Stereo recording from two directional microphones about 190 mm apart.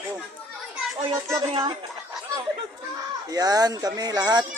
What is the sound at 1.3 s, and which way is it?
Speech, 25° right (ahead or behind).